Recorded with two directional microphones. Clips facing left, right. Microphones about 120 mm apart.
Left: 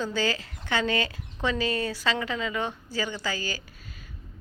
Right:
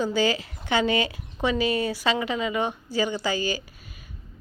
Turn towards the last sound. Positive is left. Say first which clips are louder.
# right 6 dB
turn(degrees=-15)  # may be behind; listen again after turning